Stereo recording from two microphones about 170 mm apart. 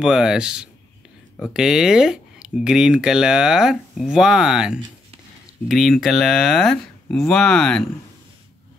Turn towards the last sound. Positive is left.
turn(degrees=5)  # may be behind; listen again after turning